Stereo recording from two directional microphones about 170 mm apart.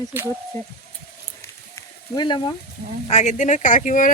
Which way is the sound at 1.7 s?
25° left (ahead or behind).